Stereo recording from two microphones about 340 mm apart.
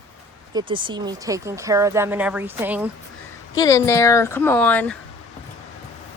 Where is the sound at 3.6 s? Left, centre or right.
Centre.